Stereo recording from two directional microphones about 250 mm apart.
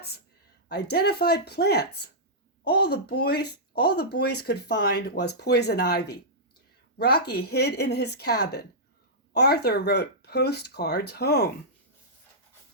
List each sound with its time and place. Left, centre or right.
0.7 s speech: left